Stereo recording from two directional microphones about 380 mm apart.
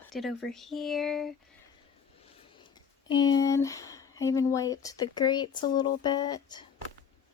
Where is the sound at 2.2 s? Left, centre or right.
Centre.